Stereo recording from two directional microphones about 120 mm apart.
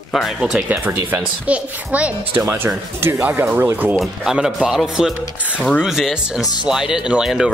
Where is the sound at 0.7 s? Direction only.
20° right (ahead or behind).